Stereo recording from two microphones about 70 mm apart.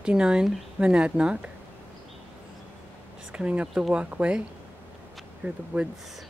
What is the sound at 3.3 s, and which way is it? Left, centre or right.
Speech, centre.